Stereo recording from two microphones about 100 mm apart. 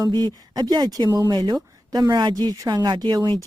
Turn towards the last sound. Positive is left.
turn(degrees=-45)  # may be behind; listen again after turning